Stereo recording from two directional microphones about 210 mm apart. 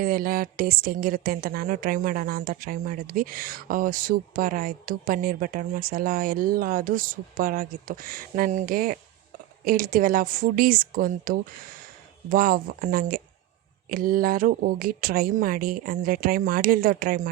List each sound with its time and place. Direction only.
0.0 s a woman's voice: 45° right (ahead or behind)